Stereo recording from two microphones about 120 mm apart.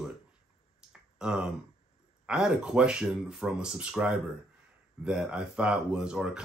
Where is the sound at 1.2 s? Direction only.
5° right (ahead or behind).